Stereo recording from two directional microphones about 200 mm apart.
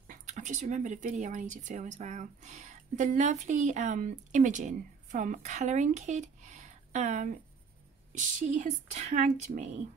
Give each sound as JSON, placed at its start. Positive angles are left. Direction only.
{"t": 0.1, "sound": "speech", "side_deg": -40}